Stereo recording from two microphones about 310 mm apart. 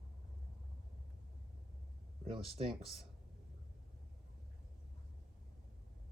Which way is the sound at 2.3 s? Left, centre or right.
Centre.